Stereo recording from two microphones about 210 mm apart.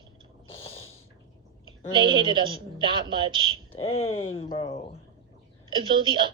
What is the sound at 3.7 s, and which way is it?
Speech, 30° left (ahead or behind).